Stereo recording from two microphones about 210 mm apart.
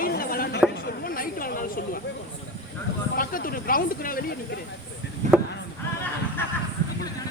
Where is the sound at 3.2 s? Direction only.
40° left (ahead or behind).